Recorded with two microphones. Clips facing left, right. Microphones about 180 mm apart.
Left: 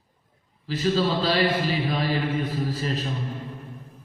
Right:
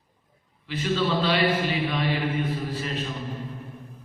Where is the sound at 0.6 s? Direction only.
35° left (ahead or behind).